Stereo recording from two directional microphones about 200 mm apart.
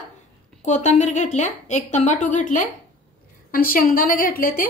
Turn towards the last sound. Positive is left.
turn(degrees=45)  # may be behind; listen again after turning